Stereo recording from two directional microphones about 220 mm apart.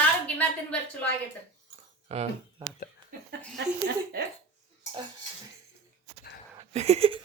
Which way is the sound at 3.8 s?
45° right (ahead or behind).